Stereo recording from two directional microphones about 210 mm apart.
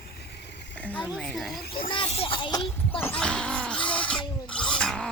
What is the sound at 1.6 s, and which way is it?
Speech, 45° left (ahead or behind).